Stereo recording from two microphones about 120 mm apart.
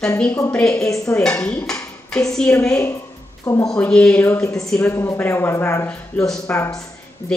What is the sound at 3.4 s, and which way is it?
Speech, 25° left (ahead or behind).